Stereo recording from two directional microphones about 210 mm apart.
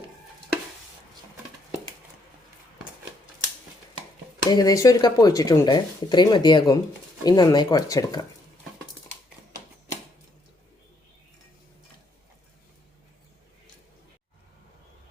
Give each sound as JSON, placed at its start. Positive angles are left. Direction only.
{"t": 4.4, "sound": "speech", "side_deg": 20}